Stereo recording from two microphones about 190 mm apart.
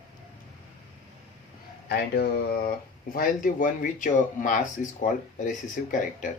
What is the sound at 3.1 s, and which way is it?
Speech, 45° left (ahead or behind).